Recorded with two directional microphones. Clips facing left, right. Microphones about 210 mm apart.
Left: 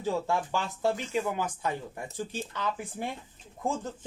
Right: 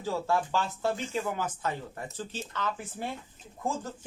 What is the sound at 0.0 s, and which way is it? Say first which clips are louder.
Speech: even; 15° left (ahead or behind).